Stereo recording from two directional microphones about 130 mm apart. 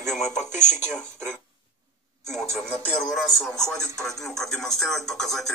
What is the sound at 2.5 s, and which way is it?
Speech, 5° left (ahead or behind).